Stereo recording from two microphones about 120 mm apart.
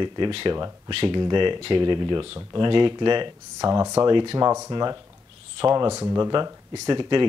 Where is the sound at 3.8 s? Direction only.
20° right (ahead or behind).